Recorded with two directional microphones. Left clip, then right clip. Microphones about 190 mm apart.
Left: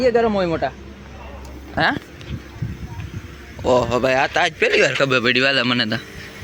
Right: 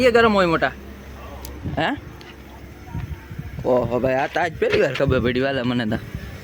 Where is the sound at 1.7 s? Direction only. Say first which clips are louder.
Left 4 dB; 20° right (ahead or behind).